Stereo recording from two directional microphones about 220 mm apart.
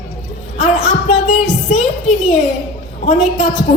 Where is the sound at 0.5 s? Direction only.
30° left (ahead or behind).